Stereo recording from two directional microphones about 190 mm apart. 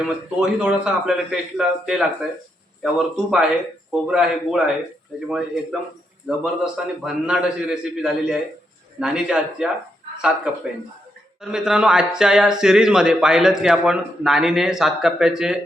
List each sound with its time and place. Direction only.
0.0 s speech: 5° right (ahead or behind)
6.2 s speech: 5° right (ahead or behind)